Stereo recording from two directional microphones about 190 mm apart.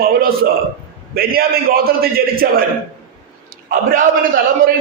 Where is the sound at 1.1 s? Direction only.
50° right (ahead or behind).